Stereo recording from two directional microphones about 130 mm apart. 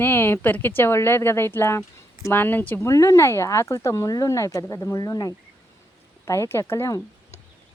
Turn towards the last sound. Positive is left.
turn(degrees=20)  # may be behind; listen again after turning